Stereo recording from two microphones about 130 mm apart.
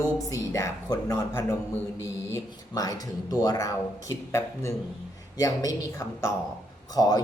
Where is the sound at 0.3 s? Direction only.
25° left (ahead or behind).